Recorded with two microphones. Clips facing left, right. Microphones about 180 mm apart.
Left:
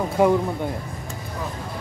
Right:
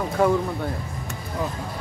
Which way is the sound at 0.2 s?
15° left (ahead or behind).